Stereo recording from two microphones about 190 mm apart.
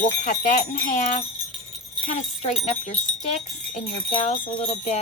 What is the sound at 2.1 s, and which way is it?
Speech, 35° left (ahead or behind).